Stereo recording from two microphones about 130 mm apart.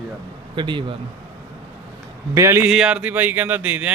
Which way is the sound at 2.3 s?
20° right (ahead or behind).